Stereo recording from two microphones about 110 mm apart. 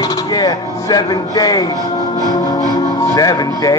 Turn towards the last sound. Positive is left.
turn(degrees=30)  # may be behind; listen again after turning